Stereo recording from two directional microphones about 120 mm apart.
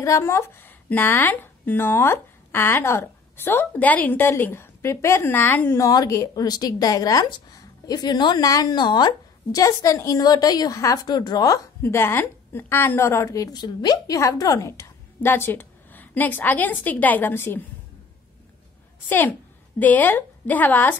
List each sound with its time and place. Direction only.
0.0 s a woman's voice: 25° left (ahead or behind)
5.8 s a woman's voice: 30° left (ahead or behind)
19.0 s a woman's voice: 15° left (ahead or behind)